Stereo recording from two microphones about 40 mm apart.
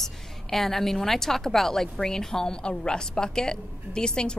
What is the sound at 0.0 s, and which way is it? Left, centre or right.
A woman's voice, centre.